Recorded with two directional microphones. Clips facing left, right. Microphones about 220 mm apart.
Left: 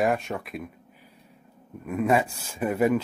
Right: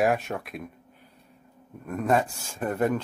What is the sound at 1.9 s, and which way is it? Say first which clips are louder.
Speech: left 1 dB; 5° left (ahead or behind).